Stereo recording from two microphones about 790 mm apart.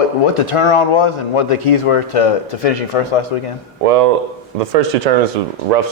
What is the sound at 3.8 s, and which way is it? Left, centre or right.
Speech, right.